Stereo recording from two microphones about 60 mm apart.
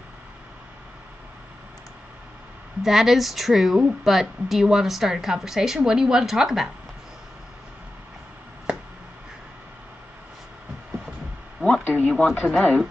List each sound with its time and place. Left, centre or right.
2.8 s a woman's voice: centre
11.6 s speech: left
12.4 s speech: centre